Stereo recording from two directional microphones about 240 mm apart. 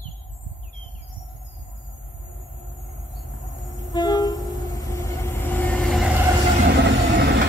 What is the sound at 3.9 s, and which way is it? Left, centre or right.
Train, centre.